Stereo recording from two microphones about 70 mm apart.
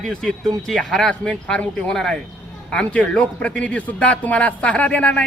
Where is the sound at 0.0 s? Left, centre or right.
Centre.